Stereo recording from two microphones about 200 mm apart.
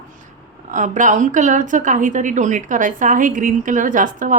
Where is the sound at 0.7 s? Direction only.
40° right (ahead or behind).